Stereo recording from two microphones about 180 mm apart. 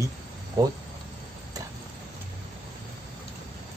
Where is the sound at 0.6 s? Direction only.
20° right (ahead or behind).